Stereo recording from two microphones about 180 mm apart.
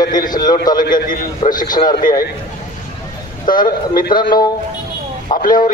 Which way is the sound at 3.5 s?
25° left (ahead or behind).